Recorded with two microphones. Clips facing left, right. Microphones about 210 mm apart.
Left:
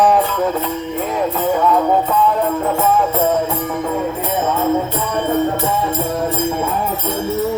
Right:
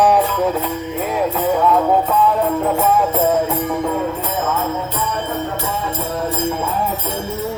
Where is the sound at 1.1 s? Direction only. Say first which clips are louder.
Even; centre (ahead or behind).